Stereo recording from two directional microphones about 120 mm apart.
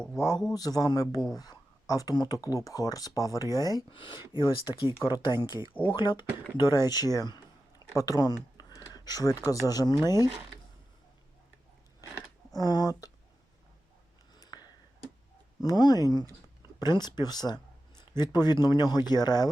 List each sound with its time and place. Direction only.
0.2 s speech: 30° left (ahead or behind)
12.5 s speech: 35° left (ahead or behind)
14.3 s a sound: 35° left (ahead or behind)
15.6 s speech: 35° left (ahead or behind)